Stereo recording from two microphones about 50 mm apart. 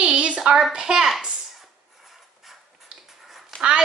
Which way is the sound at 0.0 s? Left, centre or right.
Right.